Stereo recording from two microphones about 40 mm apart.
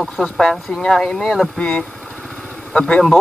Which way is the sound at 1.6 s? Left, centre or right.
Left.